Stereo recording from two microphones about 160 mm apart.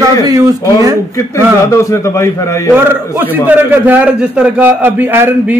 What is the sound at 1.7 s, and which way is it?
A man's voice, 20° left (ahead or behind).